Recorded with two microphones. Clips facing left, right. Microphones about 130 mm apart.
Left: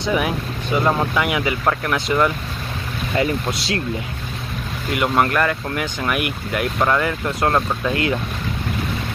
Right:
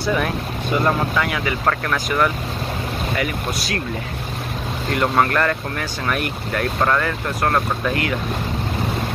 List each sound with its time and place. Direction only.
0.0 s speech: 15° left (ahead or behind)
4.9 s speech: 10° left (ahead or behind)